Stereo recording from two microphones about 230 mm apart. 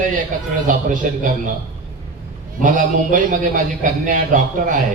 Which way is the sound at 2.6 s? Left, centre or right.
Right.